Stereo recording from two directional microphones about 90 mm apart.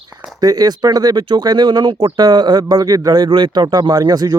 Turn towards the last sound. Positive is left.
turn(degrees=-50)  # may be behind; listen again after turning